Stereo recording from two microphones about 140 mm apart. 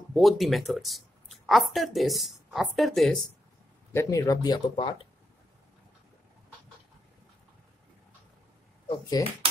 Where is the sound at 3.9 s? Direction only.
20° left (ahead or behind).